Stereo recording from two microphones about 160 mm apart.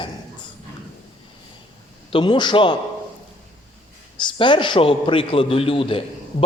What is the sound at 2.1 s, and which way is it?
Speech, 30° left (ahead or behind).